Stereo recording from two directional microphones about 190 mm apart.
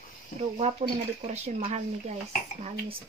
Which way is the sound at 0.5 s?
35° right (ahead or behind).